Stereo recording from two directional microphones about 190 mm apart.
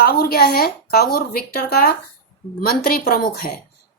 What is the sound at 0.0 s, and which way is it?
Speech, 55° left (ahead or behind).